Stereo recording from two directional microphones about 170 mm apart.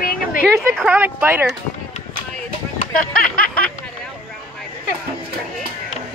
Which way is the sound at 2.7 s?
55° left (ahead or behind).